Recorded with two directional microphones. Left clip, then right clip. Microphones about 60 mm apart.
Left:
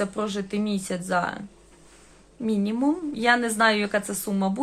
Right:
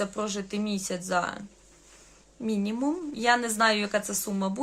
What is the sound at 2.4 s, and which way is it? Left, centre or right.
A woman's voice, right.